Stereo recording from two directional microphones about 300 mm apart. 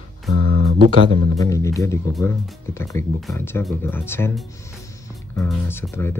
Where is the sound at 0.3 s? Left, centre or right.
Right.